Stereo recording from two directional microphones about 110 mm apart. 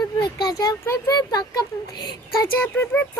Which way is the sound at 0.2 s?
40° left (ahead or behind).